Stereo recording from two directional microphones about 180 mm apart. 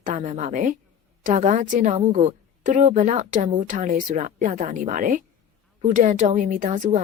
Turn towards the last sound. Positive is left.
turn(degrees=-50)  # may be behind; listen again after turning